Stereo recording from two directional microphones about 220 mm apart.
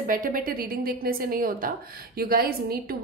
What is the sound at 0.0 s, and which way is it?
A woman's voice, 40° right (ahead or behind).